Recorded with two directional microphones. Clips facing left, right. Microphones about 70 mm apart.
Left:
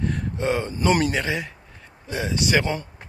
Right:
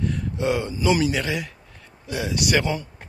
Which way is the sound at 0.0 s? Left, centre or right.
Left.